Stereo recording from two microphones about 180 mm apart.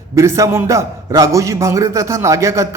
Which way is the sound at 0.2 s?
15° right (ahead or behind).